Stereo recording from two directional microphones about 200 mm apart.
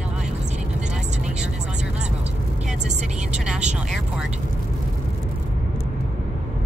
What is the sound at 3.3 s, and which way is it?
Speech, 5° right (ahead or behind).